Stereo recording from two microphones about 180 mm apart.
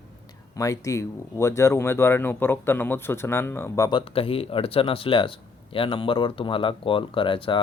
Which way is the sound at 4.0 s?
30° left (ahead or behind).